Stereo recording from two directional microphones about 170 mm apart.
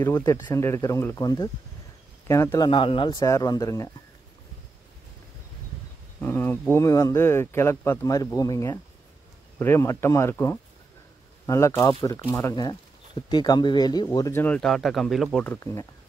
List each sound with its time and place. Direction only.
0.2 s speech: 20° left (ahead or behind)
2.7 s speech: 30° left (ahead or behind)
3.3 s speech: 20° left (ahead or behind)
6.2 s speech: 10° left (ahead or behind)